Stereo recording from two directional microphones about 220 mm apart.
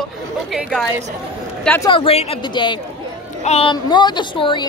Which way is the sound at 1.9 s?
25° left (ahead or behind).